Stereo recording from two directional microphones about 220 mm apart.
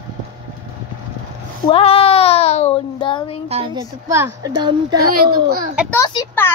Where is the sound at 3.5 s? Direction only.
25° right (ahead or behind).